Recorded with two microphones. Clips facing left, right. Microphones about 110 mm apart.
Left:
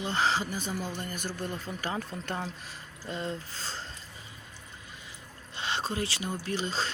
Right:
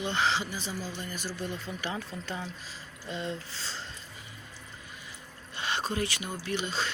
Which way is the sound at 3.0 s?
45° left (ahead or behind).